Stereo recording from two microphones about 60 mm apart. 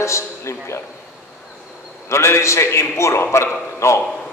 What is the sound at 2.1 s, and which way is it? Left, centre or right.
A man's voice, left.